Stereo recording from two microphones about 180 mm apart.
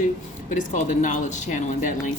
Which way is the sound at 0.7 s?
45° left (ahead or behind).